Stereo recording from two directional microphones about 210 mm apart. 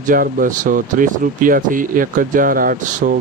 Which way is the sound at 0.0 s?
40° right (ahead or behind).